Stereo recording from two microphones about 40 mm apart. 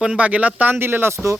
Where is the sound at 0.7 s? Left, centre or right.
Right.